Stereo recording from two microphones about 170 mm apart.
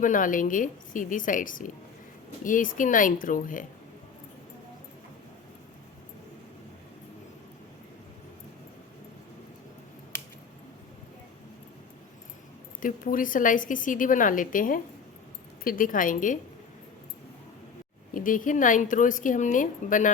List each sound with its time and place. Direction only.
0.0 s a woman's voice: 50° left (ahead or behind)
12.8 s a woman's voice: 55° left (ahead or behind)
18.1 s a woman's voice: 55° left (ahead or behind)